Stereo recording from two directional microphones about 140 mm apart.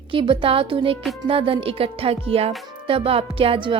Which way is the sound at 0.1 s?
40° right (ahead or behind).